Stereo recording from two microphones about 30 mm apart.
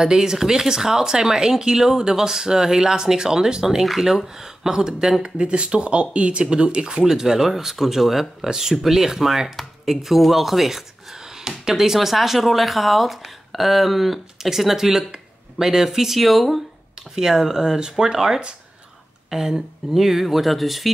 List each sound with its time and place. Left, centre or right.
0.0 s speech: centre
5.2 s speech: right
7.4 s speech: centre
11.4 s speech: centre
17.1 s speech: centre